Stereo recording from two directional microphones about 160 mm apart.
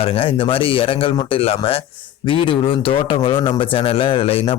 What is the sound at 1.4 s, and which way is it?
Speech, 35° left (ahead or behind).